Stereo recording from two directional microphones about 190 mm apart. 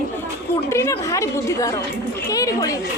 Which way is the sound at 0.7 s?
15° left (ahead or behind).